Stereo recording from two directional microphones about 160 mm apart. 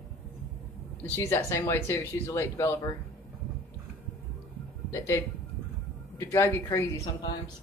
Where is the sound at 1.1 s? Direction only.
15° left (ahead or behind).